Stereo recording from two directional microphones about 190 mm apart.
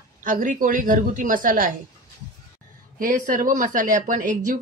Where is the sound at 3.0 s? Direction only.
45° right (ahead or behind).